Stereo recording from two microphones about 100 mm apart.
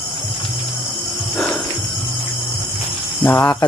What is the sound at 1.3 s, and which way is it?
Cricket, 5° left (ahead or behind).